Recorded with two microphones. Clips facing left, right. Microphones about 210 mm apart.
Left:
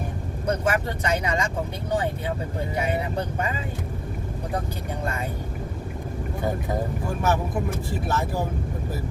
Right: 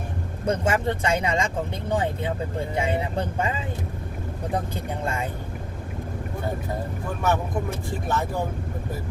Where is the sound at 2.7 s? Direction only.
30° right (ahead or behind).